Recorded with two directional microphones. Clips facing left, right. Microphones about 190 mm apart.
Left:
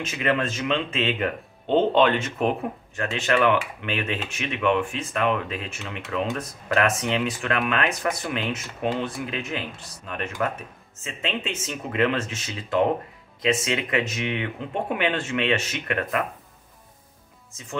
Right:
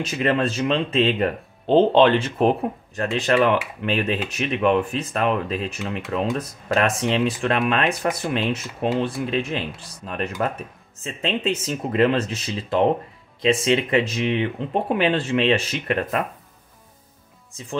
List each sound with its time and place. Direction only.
0.0 s speech: 35° right (ahead or behind)